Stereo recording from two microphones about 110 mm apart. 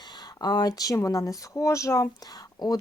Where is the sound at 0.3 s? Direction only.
40° left (ahead or behind).